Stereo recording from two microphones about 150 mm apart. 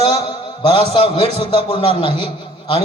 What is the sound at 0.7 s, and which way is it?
A man's voice, 40° left (ahead or behind).